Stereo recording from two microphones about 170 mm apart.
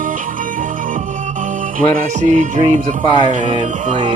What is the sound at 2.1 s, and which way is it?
Music, 45° right (ahead or behind).